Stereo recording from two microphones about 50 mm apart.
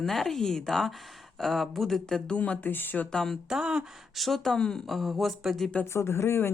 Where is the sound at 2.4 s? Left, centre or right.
Left.